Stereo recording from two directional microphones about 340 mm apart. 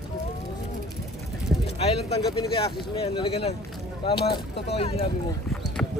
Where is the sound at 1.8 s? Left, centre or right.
Centre.